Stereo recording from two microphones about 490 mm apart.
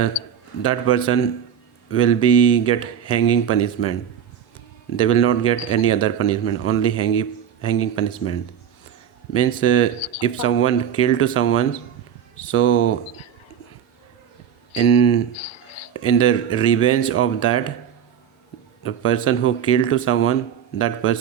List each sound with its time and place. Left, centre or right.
0.1 s a sound: left
0.6 s speech: left
4.9 s speech: left
14.8 s speech: left
18.8 s speech: left